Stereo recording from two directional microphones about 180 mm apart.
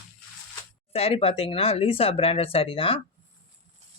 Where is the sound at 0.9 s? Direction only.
35° left (ahead or behind).